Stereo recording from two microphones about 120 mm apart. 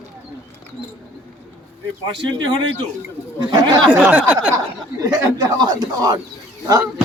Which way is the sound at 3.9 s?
15° right (ahead or behind).